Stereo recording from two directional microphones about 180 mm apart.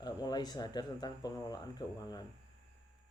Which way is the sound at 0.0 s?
25° left (ahead or behind).